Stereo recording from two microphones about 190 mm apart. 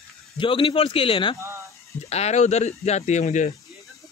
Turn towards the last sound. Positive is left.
turn(degrees=40)  # may be behind; listen again after turning